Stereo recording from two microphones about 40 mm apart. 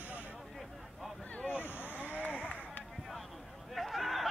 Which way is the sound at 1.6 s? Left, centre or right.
Left.